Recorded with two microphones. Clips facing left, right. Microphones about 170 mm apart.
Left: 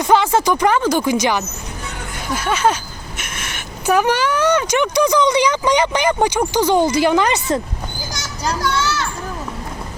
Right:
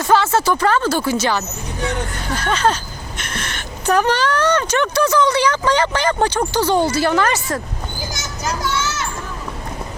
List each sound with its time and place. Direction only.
0.0 s speech: 15° left (ahead or behind)
8.6 s children playing: 20° right (ahead or behind)